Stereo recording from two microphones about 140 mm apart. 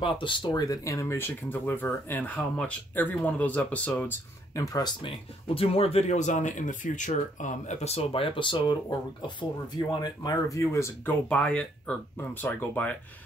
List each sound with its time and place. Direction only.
0.0 s speech: 35° left (ahead or behind); by 4.2 s 10° left (ahead or behind)
4.6 s speech: 25° left (ahead or behind)
11.2 s speech: 10° left (ahead or behind)